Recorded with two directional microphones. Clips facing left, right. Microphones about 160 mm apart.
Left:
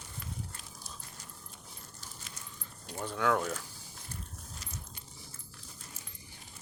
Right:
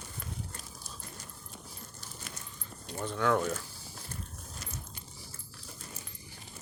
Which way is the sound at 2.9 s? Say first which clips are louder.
Right 1 dB; 10° left (ahead or behind).